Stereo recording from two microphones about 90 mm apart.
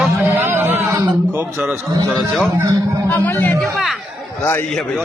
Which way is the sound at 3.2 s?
20° left (ahead or behind).